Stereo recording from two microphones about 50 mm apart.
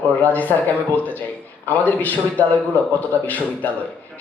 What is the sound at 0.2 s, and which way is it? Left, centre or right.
Speech, left.